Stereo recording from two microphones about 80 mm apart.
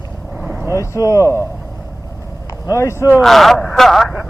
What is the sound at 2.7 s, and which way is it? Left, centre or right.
Speech, left.